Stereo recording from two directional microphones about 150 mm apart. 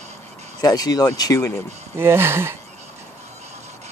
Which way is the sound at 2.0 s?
15° right (ahead or behind).